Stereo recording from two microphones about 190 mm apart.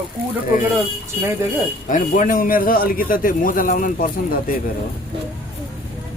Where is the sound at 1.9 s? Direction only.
45° left (ahead or behind).